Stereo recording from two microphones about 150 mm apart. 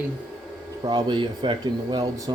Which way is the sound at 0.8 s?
25° right (ahead or behind).